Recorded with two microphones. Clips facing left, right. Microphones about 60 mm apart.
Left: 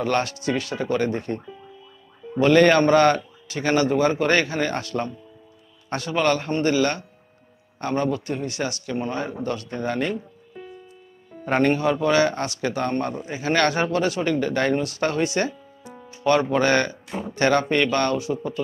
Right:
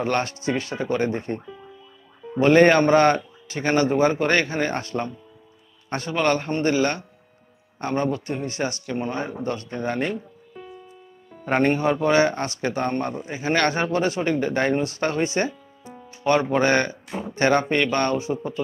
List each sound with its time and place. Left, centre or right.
0.0 s a man's voice: right
11.4 s a man's voice: right